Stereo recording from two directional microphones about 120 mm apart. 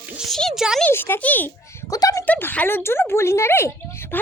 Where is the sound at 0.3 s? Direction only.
Centre (ahead or behind).